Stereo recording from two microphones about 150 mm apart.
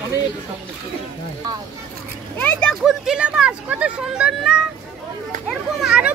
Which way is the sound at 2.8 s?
5° right (ahead or behind).